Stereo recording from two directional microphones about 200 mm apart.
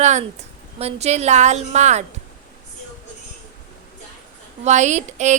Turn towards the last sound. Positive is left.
turn(degrees=-35)  # may be behind; listen again after turning